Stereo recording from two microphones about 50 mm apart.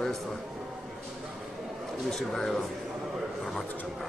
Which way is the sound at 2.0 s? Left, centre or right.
Centre.